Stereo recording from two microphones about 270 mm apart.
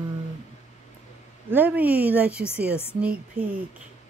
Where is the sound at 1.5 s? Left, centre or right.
Centre.